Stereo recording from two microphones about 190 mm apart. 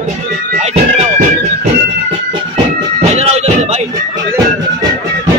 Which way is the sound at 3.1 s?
35° right (ahead or behind).